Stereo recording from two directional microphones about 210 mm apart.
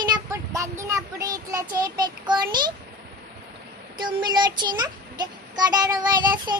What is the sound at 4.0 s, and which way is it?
Speech, 20° right (ahead or behind).